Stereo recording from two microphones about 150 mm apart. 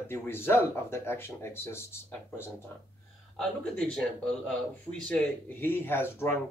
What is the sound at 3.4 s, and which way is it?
Speech, 5° left (ahead or behind).